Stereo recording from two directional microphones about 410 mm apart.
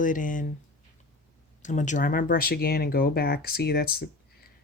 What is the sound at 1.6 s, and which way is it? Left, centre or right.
Speech, centre.